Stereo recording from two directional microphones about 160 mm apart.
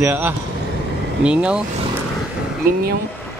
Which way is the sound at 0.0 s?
10° right (ahead or behind).